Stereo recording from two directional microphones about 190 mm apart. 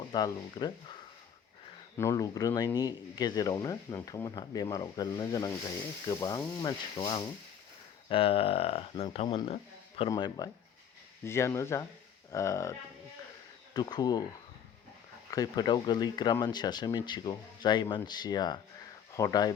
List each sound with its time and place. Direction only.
0.1 s speech: 20° left (ahead or behind)
2.0 s speech: 15° left (ahead or behind)
13.7 s speech: 20° left (ahead or behind)
15.3 s speech: 20° left (ahead or behind)